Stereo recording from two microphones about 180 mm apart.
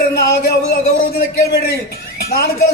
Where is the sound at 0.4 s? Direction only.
60° left (ahead or behind).